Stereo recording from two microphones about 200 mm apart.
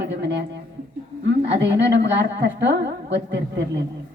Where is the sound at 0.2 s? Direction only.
60° right (ahead or behind).